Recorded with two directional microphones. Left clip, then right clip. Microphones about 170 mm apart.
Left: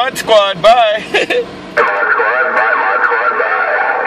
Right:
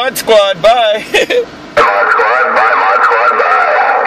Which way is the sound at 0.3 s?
25° right (ahead or behind).